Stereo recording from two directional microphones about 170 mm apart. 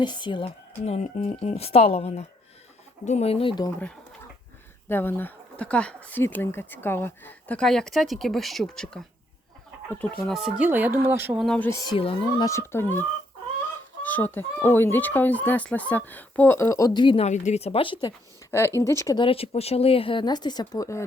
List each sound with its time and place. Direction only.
0.0 s speech: 25° left (ahead or behind)
4.9 s speech: 15° left (ahead or behind)
10.7 s speech: 10° right (ahead or behind)
11.3 s speech: 5° left (ahead or behind)
11.9 s speech: 35° left (ahead or behind)
12.5 s speech: 15° left (ahead or behind)
17.2 s speech: 45° left (ahead or behind)
18.5 s speech: 15° left (ahead or behind)